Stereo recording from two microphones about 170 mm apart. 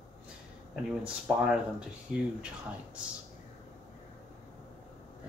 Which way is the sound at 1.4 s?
5° right (ahead or behind).